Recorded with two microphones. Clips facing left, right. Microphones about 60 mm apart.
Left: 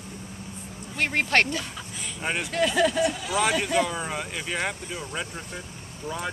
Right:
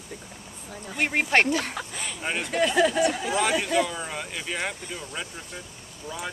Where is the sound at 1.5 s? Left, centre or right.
Right.